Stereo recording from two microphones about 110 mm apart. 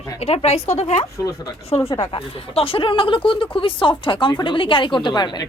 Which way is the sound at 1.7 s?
60° left (ahead or behind).